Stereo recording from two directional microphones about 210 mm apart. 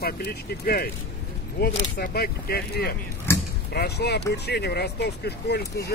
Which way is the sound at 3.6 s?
50° left (ahead or behind).